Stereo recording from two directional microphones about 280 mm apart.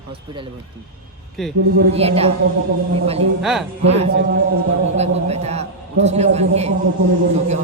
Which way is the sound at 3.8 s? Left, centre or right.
Right.